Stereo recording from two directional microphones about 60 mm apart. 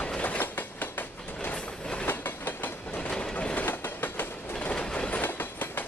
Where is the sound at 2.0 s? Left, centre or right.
Left.